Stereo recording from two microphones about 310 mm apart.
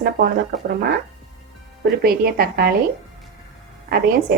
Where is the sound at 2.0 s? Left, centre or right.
Right.